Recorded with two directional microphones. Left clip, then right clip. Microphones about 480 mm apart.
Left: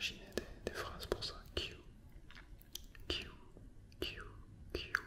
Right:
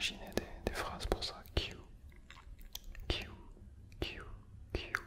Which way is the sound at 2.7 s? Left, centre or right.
Centre.